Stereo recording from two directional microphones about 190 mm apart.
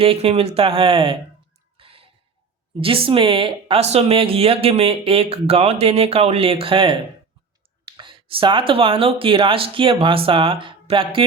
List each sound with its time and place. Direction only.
0.0 s speech: 30° right (ahead or behind)
1.8 s a sound: 30° right (ahead or behind)
2.8 s speech: 30° right (ahead or behind)